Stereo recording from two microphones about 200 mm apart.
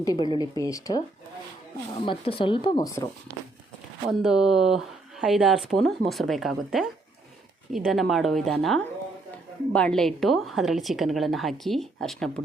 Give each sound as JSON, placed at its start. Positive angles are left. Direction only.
{"t": 0.0, "sound": "speech", "side_deg": 20}
{"t": 2.0, "sound": "speech", "side_deg": 25}
{"t": 4.1, "sound": "a woman's voice", "side_deg": 0}